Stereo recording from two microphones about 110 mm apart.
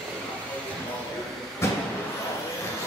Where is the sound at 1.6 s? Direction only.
25° left (ahead or behind).